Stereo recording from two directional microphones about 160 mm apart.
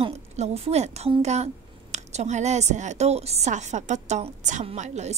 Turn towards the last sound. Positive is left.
turn(degrees=-45)  # may be behind; listen again after turning